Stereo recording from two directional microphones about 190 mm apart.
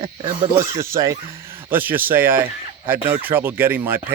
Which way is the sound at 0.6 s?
15° right (ahead or behind).